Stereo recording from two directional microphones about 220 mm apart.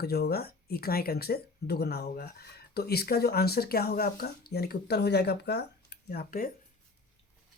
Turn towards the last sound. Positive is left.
turn(degrees=45)  # may be behind; listen again after turning